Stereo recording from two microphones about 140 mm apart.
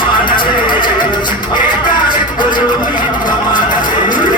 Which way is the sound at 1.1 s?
35° left (ahead or behind).